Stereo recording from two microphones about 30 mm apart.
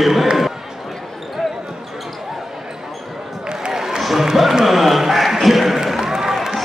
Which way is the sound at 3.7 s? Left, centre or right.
Centre.